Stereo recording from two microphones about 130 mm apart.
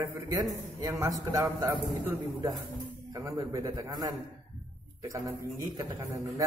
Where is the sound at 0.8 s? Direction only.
30° right (ahead or behind).